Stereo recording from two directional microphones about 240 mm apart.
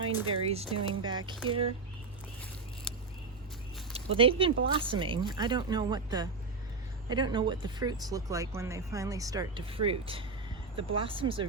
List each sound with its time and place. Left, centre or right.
0.0 s speech: right
3.9 s speech: right